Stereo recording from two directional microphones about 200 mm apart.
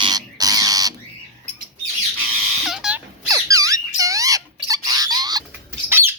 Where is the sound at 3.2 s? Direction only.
15° right (ahead or behind).